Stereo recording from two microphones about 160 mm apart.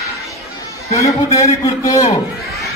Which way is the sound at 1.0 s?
20° left (ahead or behind).